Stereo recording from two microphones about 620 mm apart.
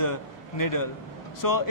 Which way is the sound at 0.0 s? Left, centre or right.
Left.